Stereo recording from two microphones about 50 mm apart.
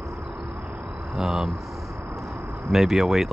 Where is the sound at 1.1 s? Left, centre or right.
Centre.